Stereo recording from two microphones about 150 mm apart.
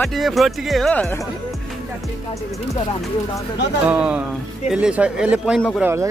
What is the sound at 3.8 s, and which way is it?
Speech, 5° right (ahead or behind).